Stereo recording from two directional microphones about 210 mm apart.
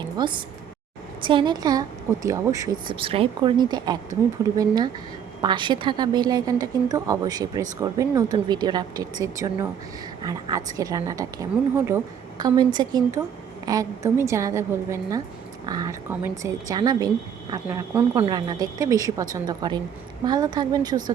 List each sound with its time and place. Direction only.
0.2 s a woman's voice: 20° right (ahead or behind)